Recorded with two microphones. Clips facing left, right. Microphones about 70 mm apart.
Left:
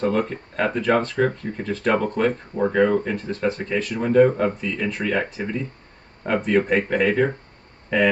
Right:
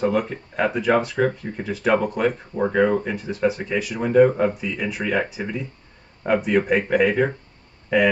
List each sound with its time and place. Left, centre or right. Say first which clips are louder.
0.0 s speech: even; centre